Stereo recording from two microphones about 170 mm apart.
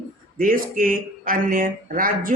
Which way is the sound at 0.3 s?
55° right (ahead or behind).